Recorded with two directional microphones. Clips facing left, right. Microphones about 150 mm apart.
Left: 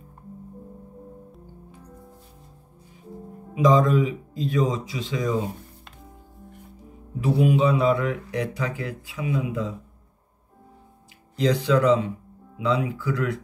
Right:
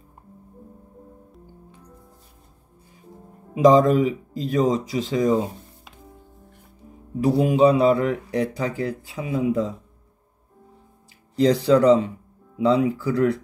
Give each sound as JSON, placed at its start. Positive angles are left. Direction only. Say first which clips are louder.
{"t": 3.5, "sound": "speech", "louder": "right 4 dB", "side_deg": -35}
{"t": 7.2, "sound": "speech", "louder": "right 3 dB", "side_deg": -35}
{"t": 11.4, "sound": "speech", "louder": "right 4 dB", "side_deg": -35}